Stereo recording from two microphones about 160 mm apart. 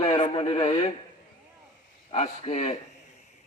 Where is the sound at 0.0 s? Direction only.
35° left (ahead or behind).